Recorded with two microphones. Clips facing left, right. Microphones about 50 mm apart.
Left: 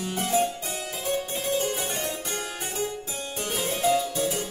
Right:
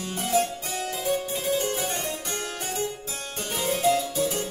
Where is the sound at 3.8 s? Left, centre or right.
Centre.